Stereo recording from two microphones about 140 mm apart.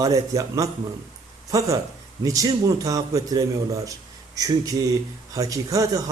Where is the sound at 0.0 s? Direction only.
25° right (ahead or behind).